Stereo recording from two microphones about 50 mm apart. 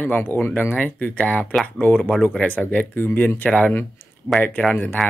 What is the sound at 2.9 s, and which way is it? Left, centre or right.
Speech, left.